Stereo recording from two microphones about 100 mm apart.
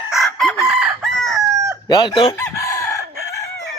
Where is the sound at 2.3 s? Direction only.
35° left (ahead or behind).